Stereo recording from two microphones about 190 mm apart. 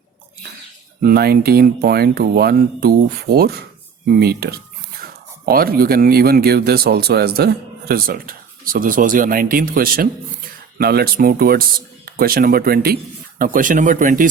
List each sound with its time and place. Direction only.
1.0 s speech: 55° right (ahead or behind)
4.0 s a sound: 55° right (ahead or behind)
5.5 s speech: 50° right (ahead or behind)